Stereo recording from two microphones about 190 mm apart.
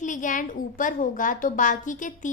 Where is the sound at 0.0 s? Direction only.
40° left (ahead or behind).